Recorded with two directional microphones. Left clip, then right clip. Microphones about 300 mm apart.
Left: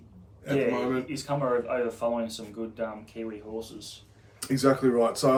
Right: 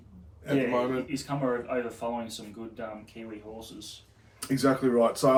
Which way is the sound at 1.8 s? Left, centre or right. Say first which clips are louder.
Left 5 dB; centre.